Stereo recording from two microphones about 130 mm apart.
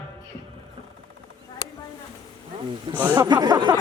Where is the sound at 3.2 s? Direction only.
35° right (ahead or behind).